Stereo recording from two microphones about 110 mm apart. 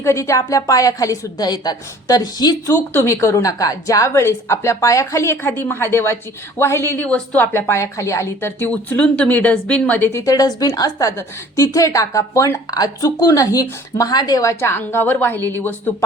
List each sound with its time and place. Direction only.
0.0 s a woman's voice: 25° left (ahead or behind)
2.9 s a woman's voice: 25° left (ahead or behind)